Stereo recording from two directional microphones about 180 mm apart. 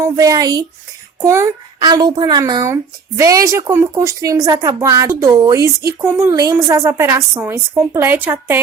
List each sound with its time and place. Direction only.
0.0 s a woman's voice: 20° right (ahead or behind)